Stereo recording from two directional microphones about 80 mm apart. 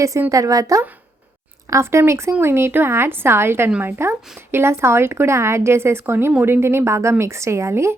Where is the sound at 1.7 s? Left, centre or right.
Right.